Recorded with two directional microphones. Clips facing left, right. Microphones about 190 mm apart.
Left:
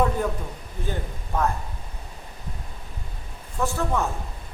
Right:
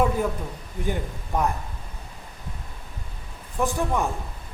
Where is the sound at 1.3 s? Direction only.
15° right (ahead or behind).